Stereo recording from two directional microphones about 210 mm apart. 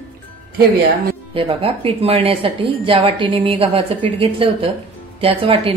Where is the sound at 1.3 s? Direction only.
25° right (ahead or behind).